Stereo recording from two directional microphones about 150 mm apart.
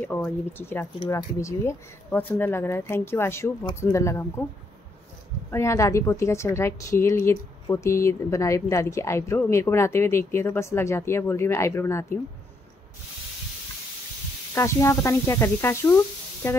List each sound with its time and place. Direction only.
0.0 s a woman's voice: 10° left (ahead or behind)
5.5 s a woman's voice: 20° left (ahead or behind)
14.5 s a woman's voice: 20° left (ahead or behind)